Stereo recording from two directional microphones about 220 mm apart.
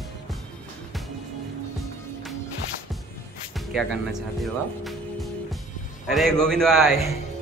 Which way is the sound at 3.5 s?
Centre (ahead or behind).